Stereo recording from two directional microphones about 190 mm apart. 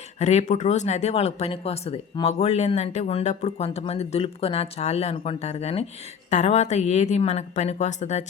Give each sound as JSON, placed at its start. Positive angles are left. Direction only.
{"t": 0.2, "sound": "speech", "side_deg": 35}